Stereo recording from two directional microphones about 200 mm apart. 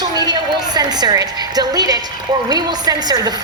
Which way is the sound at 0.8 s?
20° right (ahead or behind).